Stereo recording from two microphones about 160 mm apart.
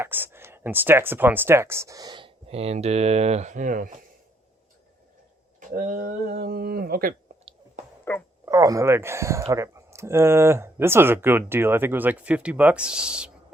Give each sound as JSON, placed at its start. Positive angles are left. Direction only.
{"t": 0.0, "sound": "speech", "side_deg": -15}
{"t": 5.5, "sound": "speech", "side_deg": -60}
{"t": 8.1, "sound": "speech", "side_deg": 15}
{"t": 8.4, "sound": "speech", "side_deg": -20}